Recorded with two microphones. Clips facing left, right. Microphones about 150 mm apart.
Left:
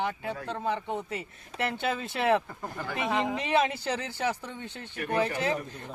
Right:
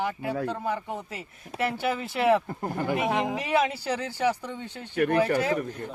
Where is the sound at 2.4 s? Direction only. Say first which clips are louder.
Right 7 dB; 50° right (ahead or behind).